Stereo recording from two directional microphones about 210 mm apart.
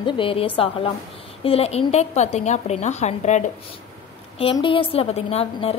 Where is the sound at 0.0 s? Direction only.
25° left (ahead or behind).